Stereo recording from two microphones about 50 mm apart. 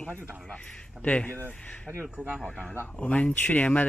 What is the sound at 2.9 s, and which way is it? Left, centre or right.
Speech, left.